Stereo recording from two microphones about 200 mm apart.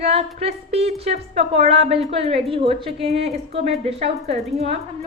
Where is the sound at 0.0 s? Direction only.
30° right (ahead or behind).